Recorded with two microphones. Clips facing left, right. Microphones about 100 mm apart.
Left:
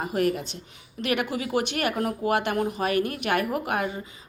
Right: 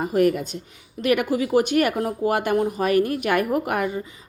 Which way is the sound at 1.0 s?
40° right (ahead or behind).